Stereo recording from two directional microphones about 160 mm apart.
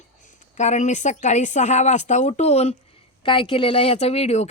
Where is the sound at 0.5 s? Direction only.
45° left (ahead or behind).